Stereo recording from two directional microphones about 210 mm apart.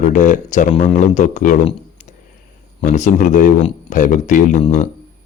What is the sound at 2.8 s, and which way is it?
Speech, 35° left (ahead or behind).